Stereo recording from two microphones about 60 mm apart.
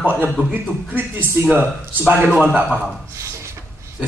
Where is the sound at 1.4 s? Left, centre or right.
Right.